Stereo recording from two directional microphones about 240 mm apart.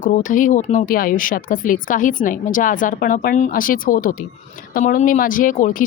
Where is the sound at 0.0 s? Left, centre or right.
Left.